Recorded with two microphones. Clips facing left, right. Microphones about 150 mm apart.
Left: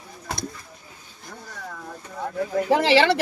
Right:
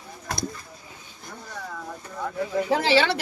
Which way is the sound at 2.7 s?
90° left.